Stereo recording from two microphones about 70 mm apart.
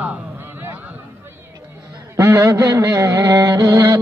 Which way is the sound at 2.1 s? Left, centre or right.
Right.